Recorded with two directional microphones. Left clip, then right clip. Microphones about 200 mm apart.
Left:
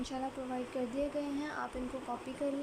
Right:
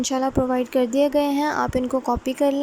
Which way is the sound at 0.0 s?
40° right (ahead or behind).